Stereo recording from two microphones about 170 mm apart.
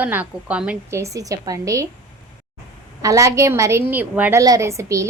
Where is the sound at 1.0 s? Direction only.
20° right (ahead or behind).